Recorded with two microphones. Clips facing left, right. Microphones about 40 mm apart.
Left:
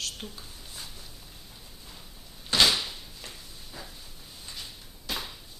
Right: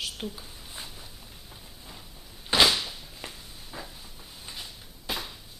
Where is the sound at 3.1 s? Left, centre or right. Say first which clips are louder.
Right 2 dB; centre.